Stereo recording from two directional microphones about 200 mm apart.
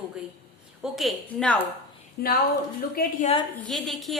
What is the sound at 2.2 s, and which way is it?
A woman's voice, 50° left (ahead or behind).